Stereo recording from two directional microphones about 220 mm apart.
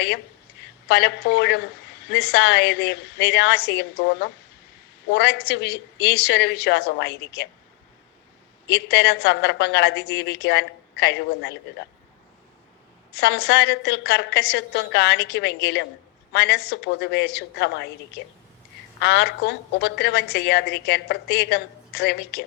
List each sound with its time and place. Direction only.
0.9 s a woman's voice: 50° left (ahead or behind)
8.6 s a woman's voice: 50° left (ahead or behind)
13.1 s a woman's voice: 50° left (ahead or behind)
18.9 s a woman's voice: 50° left (ahead or behind)